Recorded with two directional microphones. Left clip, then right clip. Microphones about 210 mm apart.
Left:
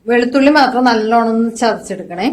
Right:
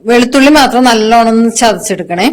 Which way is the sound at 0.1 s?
50° right (ahead or behind).